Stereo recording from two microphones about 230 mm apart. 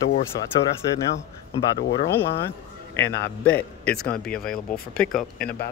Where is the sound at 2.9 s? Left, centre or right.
Centre.